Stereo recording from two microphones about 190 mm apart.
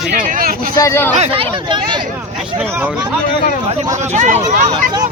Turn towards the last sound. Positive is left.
turn(degrees=-40)  # may be behind; listen again after turning